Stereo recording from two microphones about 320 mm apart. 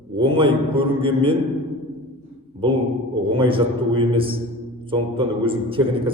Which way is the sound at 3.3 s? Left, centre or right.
Centre.